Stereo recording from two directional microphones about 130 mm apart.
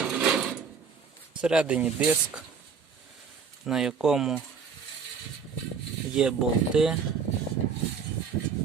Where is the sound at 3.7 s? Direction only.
5° right (ahead or behind).